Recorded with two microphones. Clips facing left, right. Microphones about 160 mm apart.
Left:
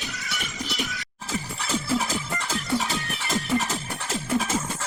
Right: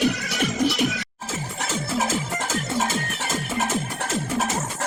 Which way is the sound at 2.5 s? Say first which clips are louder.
Right 1 dB; 45° right (ahead or behind).